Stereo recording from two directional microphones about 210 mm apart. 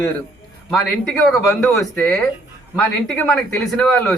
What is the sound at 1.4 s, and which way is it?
Speech, 10° left (ahead or behind).